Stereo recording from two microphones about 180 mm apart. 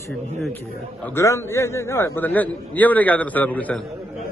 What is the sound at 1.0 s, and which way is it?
A man's voice, 15° left (ahead or behind).